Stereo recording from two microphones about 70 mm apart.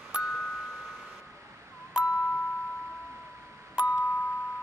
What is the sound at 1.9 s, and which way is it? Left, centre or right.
Music, centre.